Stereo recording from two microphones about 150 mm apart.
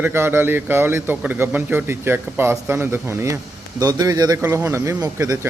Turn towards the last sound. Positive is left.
turn(degrees=-20)  # may be behind; listen again after turning